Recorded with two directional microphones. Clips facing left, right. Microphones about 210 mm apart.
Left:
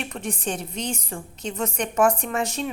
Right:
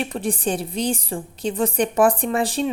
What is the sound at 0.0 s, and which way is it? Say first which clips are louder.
A woman's voice: right 6 dB; 35° right (ahead or behind).